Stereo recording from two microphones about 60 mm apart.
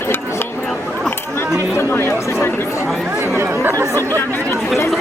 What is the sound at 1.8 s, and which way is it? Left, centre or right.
Speech, left.